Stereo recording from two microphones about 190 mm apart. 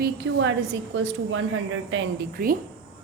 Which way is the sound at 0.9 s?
80° right.